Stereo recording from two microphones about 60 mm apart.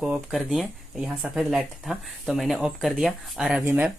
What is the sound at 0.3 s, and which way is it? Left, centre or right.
Speech, centre.